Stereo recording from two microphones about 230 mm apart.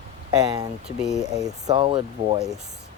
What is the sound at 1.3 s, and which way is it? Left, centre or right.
Speech, centre.